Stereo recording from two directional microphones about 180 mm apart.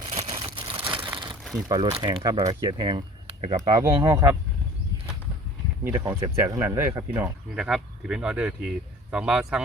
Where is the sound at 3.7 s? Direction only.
25° right (ahead or behind).